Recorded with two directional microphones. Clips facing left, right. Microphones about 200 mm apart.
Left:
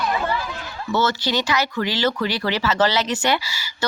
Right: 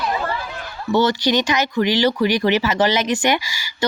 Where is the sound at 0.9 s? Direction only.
15° right (ahead or behind).